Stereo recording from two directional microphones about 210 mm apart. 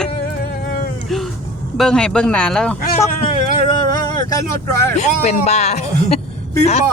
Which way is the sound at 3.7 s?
20° left (ahead or behind).